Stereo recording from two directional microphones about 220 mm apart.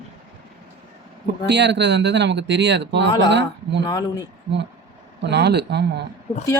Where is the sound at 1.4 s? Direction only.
50° right (ahead or behind).